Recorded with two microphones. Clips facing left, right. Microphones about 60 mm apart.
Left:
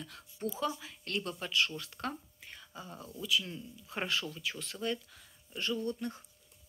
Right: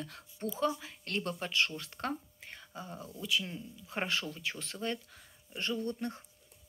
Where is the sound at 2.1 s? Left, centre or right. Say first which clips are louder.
Right 4 dB; right.